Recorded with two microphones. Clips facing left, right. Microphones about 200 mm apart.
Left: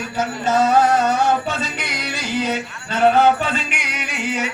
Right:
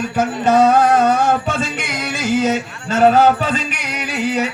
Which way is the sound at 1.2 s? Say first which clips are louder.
Right 2 dB; 50° right (ahead or behind).